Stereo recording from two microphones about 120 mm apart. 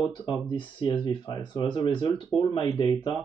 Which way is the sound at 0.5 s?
40° left (ahead or behind).